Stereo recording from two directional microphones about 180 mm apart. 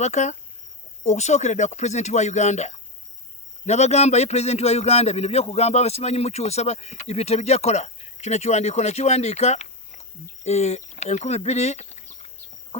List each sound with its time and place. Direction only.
0.0 s a man's voice: 40° left (ahead or behind)